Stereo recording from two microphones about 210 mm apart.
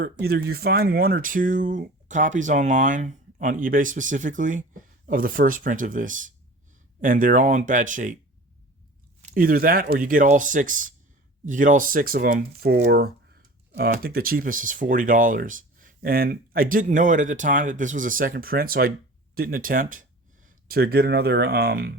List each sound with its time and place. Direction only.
0.0 s speech: 50° right (ahead or behind)
9.3 s speech: 45° right (ahead or behind)